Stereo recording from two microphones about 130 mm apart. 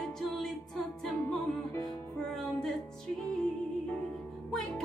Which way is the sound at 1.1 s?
15° left (ahead or behind).